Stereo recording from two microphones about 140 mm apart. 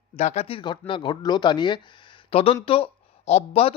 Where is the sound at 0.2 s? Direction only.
50° left (ahead or behind).